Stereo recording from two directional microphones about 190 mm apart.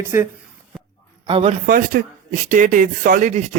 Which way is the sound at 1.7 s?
50° right (ahead or behind).